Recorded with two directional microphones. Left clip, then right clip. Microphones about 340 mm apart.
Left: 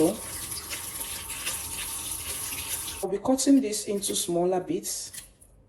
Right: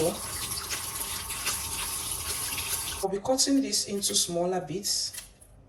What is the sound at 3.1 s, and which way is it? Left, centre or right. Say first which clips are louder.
Speech: left 3 dB; centre.